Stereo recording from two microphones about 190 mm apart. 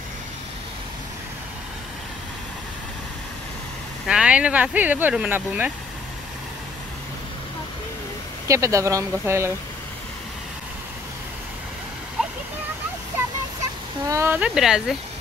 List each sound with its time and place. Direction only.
4.1 s speech: 5° right (ahead or behind)
8.5 s speech: 15° right (ahead or behind)
13.2 s a sound: 10° right (ahead or behind)
14.0 s speech: 15° right (ahead or behind)